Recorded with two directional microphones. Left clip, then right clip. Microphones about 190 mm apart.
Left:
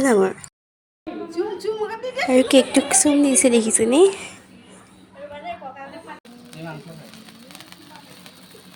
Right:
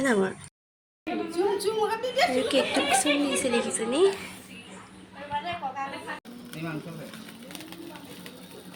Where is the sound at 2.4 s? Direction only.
40° left (ahead or behind).